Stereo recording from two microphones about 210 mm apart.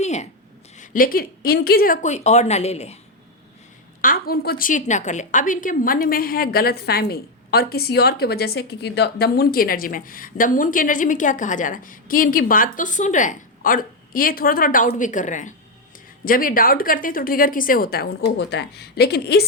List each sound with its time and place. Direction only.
0.0 s a sound: 35° left (ahead or behind)
0.8 s a woman's voice: 40° left (ahead or behind)
4.0 s a woman's voice: 45° left (ahead or behind)